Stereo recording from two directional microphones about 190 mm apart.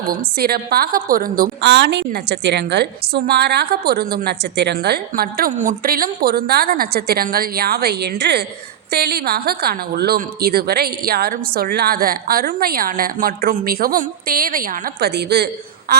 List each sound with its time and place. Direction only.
0.1 s a woman's voice: 55° right (ahead or behind)
15.9 s a woman's voice: 50° right (ahead or behind)